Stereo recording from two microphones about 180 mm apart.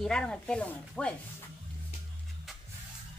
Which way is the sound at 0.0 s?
5° left (ahead or behind).